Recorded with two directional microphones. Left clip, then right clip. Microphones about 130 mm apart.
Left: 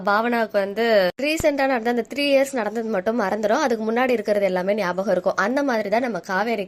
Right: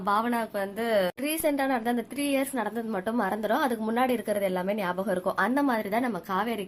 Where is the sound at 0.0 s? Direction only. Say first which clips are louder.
Left 6 dB; 30° left (ahead or behind).